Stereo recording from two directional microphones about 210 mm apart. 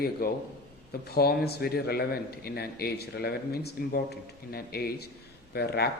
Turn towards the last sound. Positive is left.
turn(degrees=50)  # may be behind; listen again after turning